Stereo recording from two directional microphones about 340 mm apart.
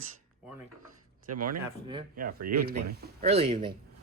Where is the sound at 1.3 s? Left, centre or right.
Right.